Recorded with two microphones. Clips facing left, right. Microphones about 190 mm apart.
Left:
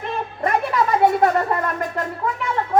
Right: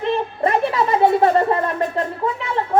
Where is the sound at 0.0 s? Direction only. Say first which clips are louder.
Right 5 dB; 30° right (ahead or behind).